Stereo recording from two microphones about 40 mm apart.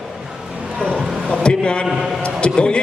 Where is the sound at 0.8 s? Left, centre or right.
Left.